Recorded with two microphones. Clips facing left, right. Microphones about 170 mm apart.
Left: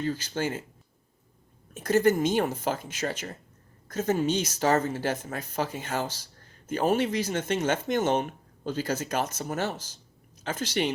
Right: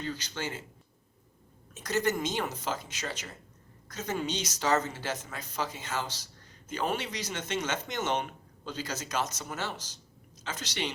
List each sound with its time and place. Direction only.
0.0 s speech: 45° left (ahead or behind)
1.7 s speech: 50° left (ahead or behind)